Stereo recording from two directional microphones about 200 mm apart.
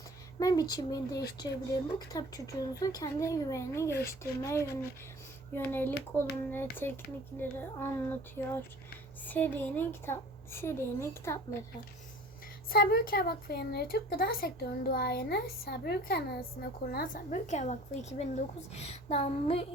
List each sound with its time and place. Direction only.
0.3 s speech: 20° left (ahead or behind)
12.7 s speech: 50° left (ahead or behind); by 19.6 s 30° left (ahead or behind)